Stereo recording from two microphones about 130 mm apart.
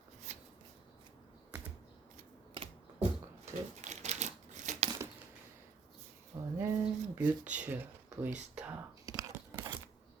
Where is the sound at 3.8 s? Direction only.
60° right (ahead or behind).